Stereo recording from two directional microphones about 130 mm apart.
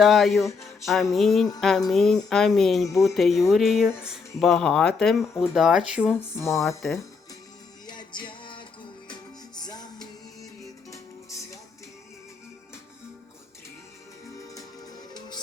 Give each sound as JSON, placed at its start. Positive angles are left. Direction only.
{"t": 0.0, "sound": "speech", "side_deg": 0}
{"t": 7.9, "sound": "music", "side_deg": 35}